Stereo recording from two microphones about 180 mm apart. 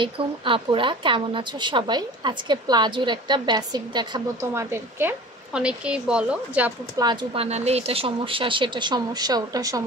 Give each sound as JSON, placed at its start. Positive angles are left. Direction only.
{"t": 0.0, "sound": "a woman's voice", "side_deg": -25}
{"t": 7.0, "sound": "a woman's voice", "side_deg": -25}
{"t": 7.4, "sound": "a woman's voice", "side_deg": -35}